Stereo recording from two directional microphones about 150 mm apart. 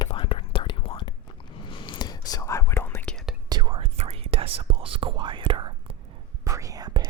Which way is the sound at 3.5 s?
30° right (ahead or behind).